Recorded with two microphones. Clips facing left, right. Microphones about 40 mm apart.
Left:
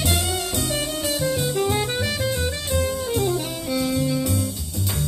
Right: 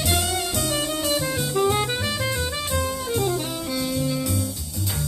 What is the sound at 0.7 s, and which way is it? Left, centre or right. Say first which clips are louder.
Music: right 1 dB; right.